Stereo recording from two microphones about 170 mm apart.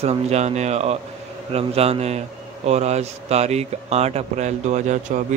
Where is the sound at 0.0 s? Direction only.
40° right (ahead or behind).